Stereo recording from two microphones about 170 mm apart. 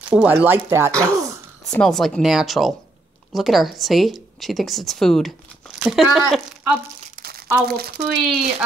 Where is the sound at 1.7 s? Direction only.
Centre (ahead or behind).